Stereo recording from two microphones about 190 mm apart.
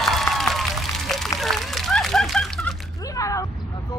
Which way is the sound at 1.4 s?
Centre (ahead or behind).